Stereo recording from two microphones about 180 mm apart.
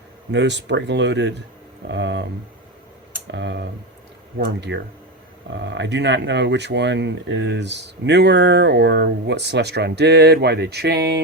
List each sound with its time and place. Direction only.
0.3 s speech: 75° right (ahead or behind)
3.2 s speech: 75° right (ahead or behind)
4.4 s speech: 60° right (ahead or behind)
5.5 s speech: 75° right (ahead or behind)